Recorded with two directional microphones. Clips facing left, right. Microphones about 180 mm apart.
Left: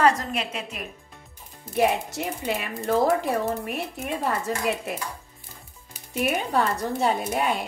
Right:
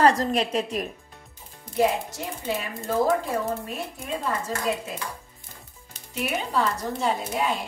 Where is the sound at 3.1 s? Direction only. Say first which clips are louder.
Left 2 dB; 70° left (ahead or behind).